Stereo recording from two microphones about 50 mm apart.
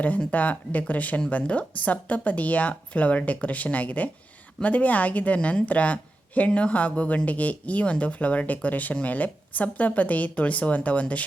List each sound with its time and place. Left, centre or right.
0.3 s speech: left